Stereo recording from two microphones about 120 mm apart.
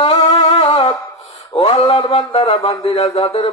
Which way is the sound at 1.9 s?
45° left (ahead or behind).